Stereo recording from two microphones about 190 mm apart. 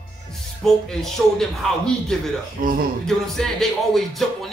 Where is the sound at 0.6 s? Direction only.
Centre (ahead or behind).